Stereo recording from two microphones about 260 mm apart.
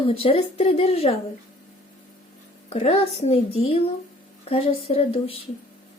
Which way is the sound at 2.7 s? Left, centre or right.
Left.